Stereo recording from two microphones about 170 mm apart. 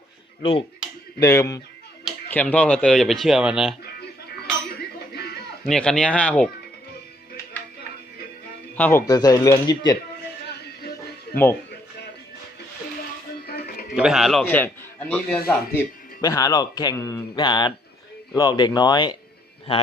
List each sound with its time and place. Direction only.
1.2 s a man's voice: 20° left (ahead or behind)
2.3 s speech: 10° left (ahead or behind)
5.6 s speech: 5° left (ahead or behind)
8.7 s a man's voice: 15° left (ahead or behind)
13.5 s music: 65° left (ahead or behind)
13.9 s a man's voice: 5° right (ahead or behind)
16.2 s a man's voice: 20° left (ahead or behind)